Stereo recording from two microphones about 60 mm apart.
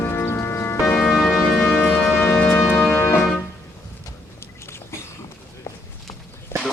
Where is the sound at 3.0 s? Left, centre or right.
Left.